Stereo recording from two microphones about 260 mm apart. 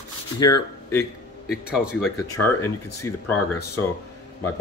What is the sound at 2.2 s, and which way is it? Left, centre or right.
Speech, centre.